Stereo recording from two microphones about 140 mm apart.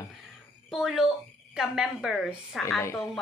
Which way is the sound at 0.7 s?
Centre (ahead or behind).